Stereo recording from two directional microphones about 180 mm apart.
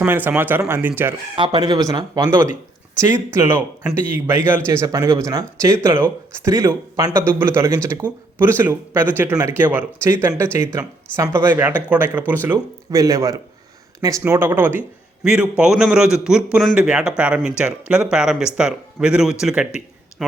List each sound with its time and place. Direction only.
0.0 s speech: 10° right (ahead or behind)
1.4 s a man's voice: 25° right (ahead or behind); by 19.6 s centre (ahead or behind)